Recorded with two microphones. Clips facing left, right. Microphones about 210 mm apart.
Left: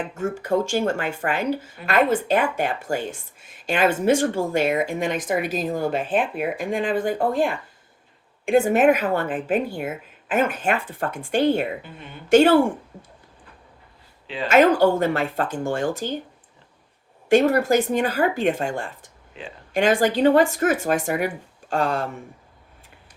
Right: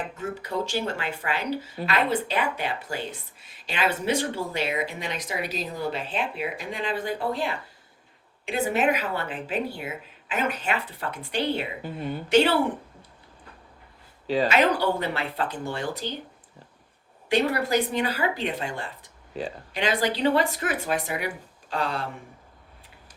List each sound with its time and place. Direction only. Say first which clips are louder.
0.1 s speech: left 8 dB; 45° left (ahead or behind)
11.8 s a woman's voice: right 9 dB; 40° right (ahead or behind)
12.3 s speech: left 6 dB; 50° left (ahead or behind)
14.4 s speech: left 8 dB; 50° left (ahead or behind)
17.2 s speech: left 7 dB; 45° left (ahead or behind)
19.3 s speech: right 6 dB; 40° right (ahead or behind)
19.7 s speech: left 7 dB; 45° left (ahead or behind)